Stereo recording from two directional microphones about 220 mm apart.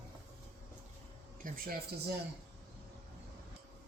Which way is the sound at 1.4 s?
40° right (ahead or behind).